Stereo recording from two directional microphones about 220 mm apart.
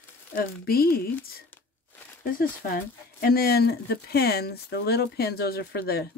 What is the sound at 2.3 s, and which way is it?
Speech, 40° left (ahead or behind).